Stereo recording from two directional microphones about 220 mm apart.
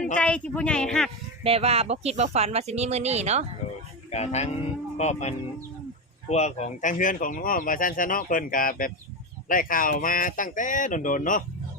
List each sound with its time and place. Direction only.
0.0 s speech: 5° left (ahead or behind)
1.5 s speech: 25° right (ahead or behind)
4.1 s speech: 30° left (ahead or behind)